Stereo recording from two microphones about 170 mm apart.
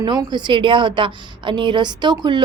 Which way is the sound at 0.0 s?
25° right (ahead or behind).